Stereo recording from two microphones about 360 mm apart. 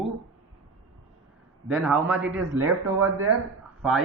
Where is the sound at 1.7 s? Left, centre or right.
Centre.